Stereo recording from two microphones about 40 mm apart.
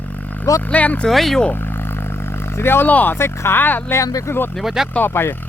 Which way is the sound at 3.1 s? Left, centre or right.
Left.